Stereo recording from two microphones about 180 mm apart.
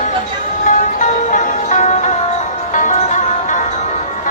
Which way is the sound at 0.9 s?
45° left (ahead or behind).